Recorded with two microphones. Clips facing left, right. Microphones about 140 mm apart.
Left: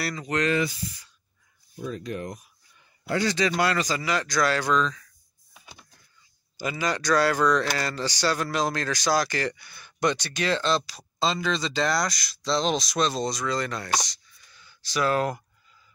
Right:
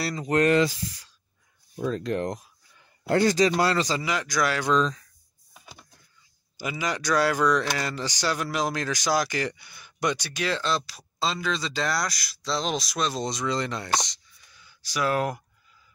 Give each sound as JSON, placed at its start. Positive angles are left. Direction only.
{"t": 0.0, "sound": "speech", "side_deg": -30}
{"t": 0.6, "sound": "speech", "side_deg": -90}
{"t": 1.8, "sound": "speech", "side_deg": -80}
{"t": 3.0, "sound": "speech", "side_deg": -50}
{"t": 3.3, "sound": "speech", "side_deg": -35}
{"t": 4.1, "sound": "speech", "side_deg": -15}
{"t": 4.7, "sound": "speech", "side_deg": -35}
{"t": 6.5, "sound": "speech", "side_deg": -10}
{"t": 13.2, "sound": "speech", "side_deg": -20}
{"t": 14.5, "sound": "a sound", "side_deg": -10}